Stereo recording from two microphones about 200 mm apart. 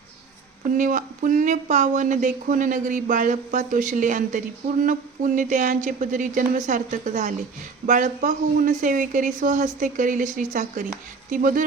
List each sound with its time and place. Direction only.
0.8 s speech: 40° right (ahead or behind)